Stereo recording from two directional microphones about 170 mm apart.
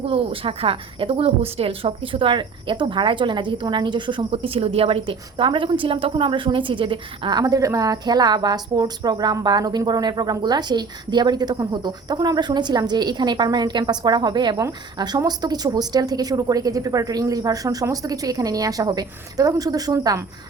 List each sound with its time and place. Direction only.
0.0 s a woman's voice: 35° right (ahead or behind)